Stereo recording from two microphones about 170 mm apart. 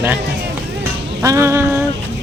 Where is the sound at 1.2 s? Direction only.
15° right (ahead or behind).